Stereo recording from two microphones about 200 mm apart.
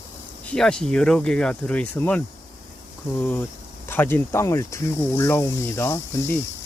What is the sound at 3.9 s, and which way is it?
Speech, 10° left (ahead or behind).